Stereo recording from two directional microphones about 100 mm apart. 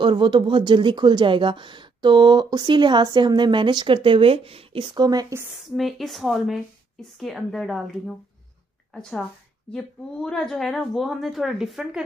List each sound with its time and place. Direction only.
0.0 s speech: 55° right (ahead or behind)
4.9 s speech: 40° right (ahead or behind)
5.6 s speech: centre (ahead or behind)
8.9 s a woman's voice: 5° left (ahead or behind)